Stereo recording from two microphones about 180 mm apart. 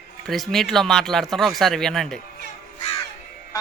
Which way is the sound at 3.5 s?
20° left (ahead or behind).